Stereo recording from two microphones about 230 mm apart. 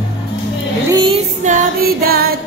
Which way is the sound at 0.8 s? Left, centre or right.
Centre.